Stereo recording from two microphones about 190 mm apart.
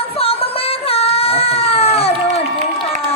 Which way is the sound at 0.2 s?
30° left (ahead or behind).